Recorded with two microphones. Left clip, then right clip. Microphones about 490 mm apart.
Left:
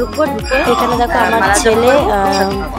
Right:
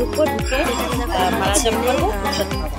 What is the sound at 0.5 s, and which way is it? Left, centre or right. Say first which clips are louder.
Speech: left 8 dB; right.